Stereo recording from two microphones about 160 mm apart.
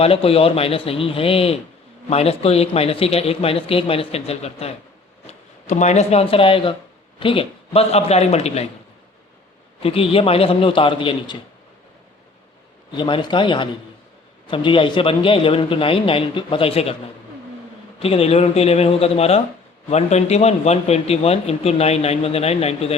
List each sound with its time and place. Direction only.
0.0 s a man's voice: 35° left (ahead or behind)
9.8 s a man's voice: 35° left (ahead or behind)
13.0 s a man's voice: 30° left (ahead or behind)
18.0 s a man's voice: 40° left (ahead or behind)